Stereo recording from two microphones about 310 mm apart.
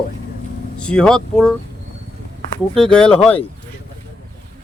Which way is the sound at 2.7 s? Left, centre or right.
Centre.